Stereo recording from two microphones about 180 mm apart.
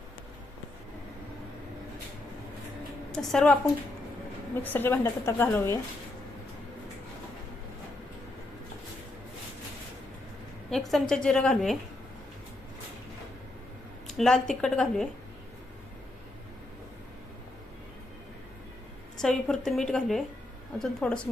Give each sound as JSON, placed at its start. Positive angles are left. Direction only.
{"t": 3.1, "sound": "a woman's voice", "side_deg": 5}
{"t": 4.6, "sound": "a woman's voice", "side_deg": 10}
{"t": 10.7, "sound": "a woman's voice", "side_deg": 0}
{"t": 14.1, "sound": "a woman's voice", "side_deg": 0}
{"t": 19.1, "sound": "a woman's voice", "side_deg": 5}